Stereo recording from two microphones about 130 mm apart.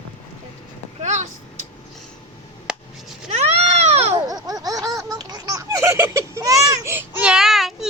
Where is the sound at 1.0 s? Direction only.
60° right (ahead or behind).